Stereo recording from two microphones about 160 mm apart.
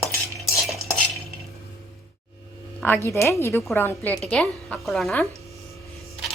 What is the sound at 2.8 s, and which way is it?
A woman's voice, 15° left (ahead or behind).